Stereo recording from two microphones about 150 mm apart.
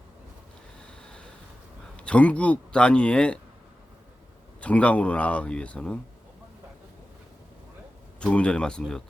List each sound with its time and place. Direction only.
2.0 s speech: 10° left (ahead or behind)
4.6 s speech: 10° left (ahead or behind)
8.2 s speech: 5° left (ahead or behind)